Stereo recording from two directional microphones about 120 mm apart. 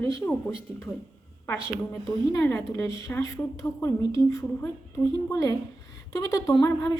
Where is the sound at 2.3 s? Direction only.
20° left (ahead or behind).